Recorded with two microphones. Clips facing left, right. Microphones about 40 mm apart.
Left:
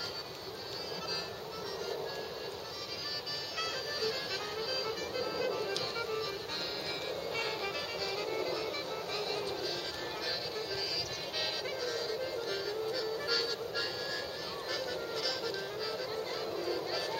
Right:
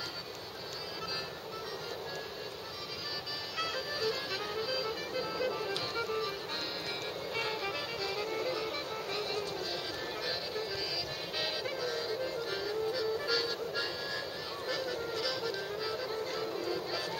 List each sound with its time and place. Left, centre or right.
3.5 s music: centre
7.3 s music: centre